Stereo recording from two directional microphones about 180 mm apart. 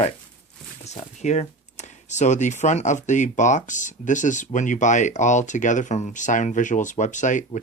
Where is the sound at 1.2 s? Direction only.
40° left (ahead or behind).